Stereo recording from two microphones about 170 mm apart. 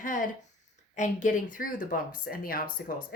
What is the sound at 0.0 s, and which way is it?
Speech, 50° left (ahead or behind).